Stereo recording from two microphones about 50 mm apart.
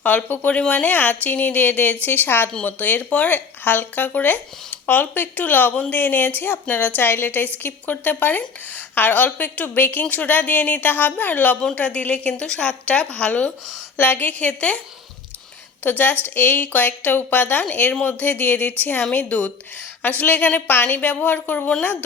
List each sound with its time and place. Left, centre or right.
0.3 s a woman's voice: left
0.9 s a woman's voice: left
14.0 s a woman's voice: left
15.8 s a woman's voice: left